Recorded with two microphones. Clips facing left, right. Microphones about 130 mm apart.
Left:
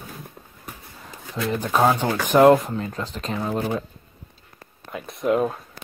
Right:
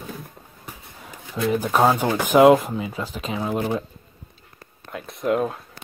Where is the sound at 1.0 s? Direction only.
5° right (ahead or behind).